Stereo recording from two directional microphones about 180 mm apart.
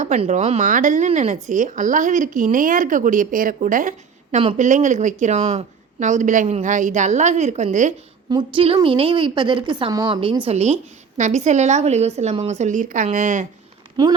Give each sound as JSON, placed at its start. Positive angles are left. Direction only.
{"t": 0.0, "sound": "speech", "side_deg": -40}
{"t": 8.3, "sound": "a woman's voice", "side_deg": -30}
{"t": 14.0, "sound": "a woman's voice", "side_deg": -25}